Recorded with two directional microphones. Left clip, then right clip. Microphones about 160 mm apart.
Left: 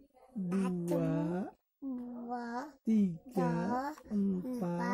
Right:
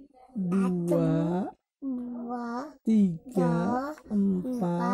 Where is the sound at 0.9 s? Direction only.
25° right (ahead or behind).